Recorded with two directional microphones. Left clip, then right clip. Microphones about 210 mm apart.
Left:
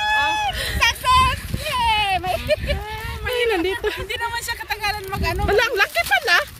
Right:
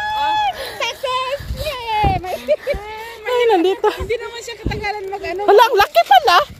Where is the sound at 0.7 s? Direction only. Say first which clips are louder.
Left 4 dB; 45° left (ahead or behind).